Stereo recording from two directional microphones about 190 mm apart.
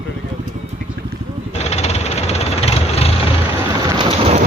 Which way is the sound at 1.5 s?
35° left (ahead or behind).